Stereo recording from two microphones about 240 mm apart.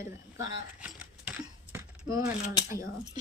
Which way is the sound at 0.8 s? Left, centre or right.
Centre.